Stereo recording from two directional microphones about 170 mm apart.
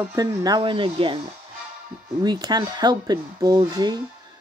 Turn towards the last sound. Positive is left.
turn(degrees=-25)  # may be behind; listen again after turning